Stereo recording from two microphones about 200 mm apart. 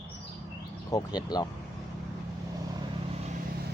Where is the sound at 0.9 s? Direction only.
20° left (ahead or behind).